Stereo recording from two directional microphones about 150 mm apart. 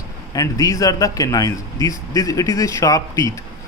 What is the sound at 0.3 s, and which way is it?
A man's voice, 20° left (ahead or behind).